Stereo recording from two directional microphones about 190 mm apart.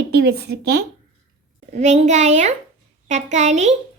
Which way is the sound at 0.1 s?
60° right (ahead or behind).